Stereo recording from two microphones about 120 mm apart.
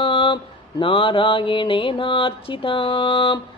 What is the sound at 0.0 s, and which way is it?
Mantra, 45° left (ahead or behind).